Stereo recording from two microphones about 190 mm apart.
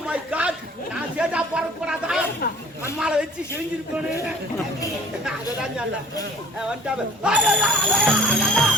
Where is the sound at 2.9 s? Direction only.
5° right (ahead or behind).